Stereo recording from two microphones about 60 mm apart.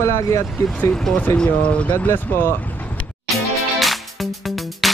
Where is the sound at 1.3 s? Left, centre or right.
Centre.